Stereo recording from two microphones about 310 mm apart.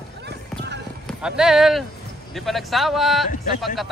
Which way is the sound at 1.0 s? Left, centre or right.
Centre.